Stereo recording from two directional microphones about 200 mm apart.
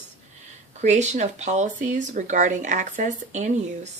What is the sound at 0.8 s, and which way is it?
Speech, 35° right (ahead or behind).